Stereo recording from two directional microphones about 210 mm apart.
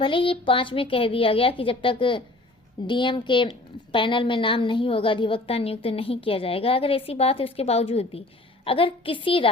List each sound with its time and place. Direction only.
0.0 s a woman's voice: 25° left (ahead or behind)